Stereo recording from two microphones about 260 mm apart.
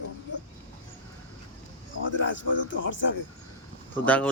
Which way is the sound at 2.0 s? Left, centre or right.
Left.